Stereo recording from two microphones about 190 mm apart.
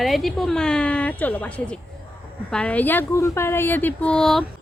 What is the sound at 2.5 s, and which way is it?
A child's voice, 5° left (ahead or behind).